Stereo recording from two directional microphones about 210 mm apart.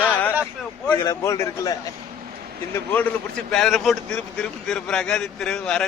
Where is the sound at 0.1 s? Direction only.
10° left (ahead or behind).